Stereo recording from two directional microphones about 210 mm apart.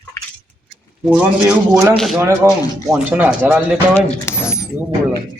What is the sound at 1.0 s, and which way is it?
Speech, 5° right (ahead or behind).